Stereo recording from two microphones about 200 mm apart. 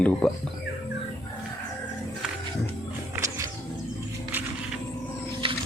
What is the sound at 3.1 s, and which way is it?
Wild animals, 15° right (ahead or behind).